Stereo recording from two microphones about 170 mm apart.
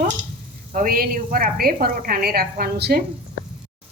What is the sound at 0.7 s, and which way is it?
A woman's voice, 55° right (ahead or behind).